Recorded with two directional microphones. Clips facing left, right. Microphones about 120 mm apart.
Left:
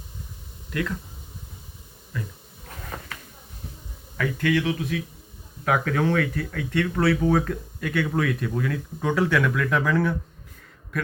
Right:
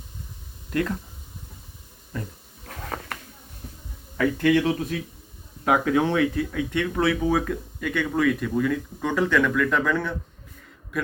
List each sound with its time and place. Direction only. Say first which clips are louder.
0.7 s speech: right 3 dB; 35° right (ahead or behind)
2.1 s a sound: right 1 dB; 35° right (ahead or behind)
4.2 s speech: right 4 dB; 25° right (ahead or behind)
5.6 s speech: right 2 dB; 20° right (ahead or behind); by 10.2 s 5° left (ahead or behind)